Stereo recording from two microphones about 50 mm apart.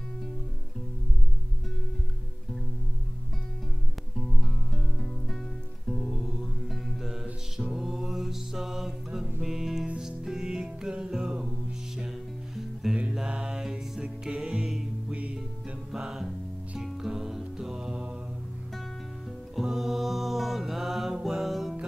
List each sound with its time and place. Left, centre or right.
5.9 s music: centre
12.8 s music: centre
13.3 s mantra: centre
14.3 s music: centre
16.0 s music: centre
19.5 s mantra: centre